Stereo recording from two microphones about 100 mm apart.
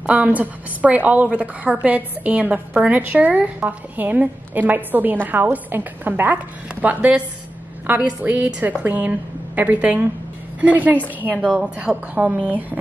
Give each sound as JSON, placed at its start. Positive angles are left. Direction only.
{"t": 0.0, "sound": "a woman's voice", "side_deg": -10}